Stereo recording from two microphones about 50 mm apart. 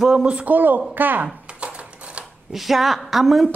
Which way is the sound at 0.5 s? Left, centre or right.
Right.